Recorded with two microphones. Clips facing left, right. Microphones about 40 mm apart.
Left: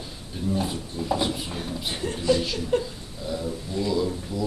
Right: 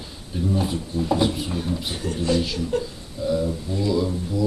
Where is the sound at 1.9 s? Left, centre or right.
Left.